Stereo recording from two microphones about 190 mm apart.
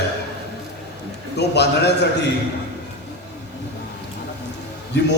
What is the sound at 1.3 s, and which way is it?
Speech, 60° left (ahead or behind).